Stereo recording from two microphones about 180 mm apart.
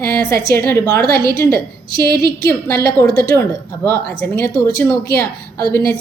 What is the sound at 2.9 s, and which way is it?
Speech, 60° right (ahead or behind).